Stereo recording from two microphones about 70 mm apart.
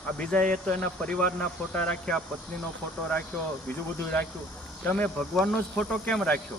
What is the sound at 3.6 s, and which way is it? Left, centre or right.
Speech, left.